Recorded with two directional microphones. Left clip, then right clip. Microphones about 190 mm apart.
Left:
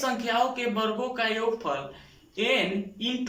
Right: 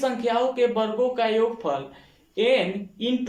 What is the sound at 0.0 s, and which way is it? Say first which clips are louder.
Speech: right 3 dB; 25° right (ahead or behind).